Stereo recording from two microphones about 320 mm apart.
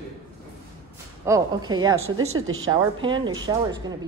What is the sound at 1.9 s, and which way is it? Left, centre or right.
Speech, right.